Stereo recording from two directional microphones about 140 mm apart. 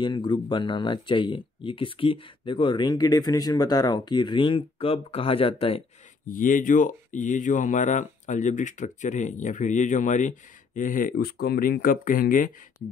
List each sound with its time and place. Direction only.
0.0 s speech: 35° left (ahead or behind)
6.2 s speech: 75° left (ahead or behind)